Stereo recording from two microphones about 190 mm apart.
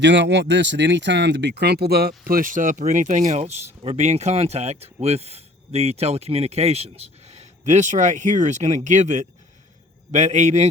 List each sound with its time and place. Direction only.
0.0 s speech: 65° right (ahead or behind); by 10.7 s 40° right (ahead or behind)